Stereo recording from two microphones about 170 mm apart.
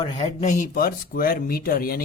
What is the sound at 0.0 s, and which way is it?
Speech, 35° left (ahead or behind).